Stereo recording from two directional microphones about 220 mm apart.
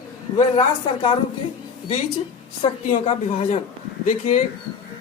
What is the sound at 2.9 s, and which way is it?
Speech, 30° left (ahead or behind).